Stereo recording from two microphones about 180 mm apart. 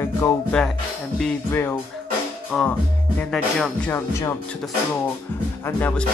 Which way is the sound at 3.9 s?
15° left (ahead or behind).